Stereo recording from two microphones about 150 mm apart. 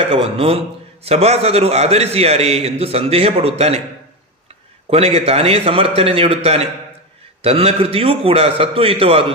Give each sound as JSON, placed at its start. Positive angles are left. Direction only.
{"t": 0.1, "sound": "a man's voice", "side_deg": -40}
{"t": 4.9, "sound": "a man's voice", "side_deg": -40}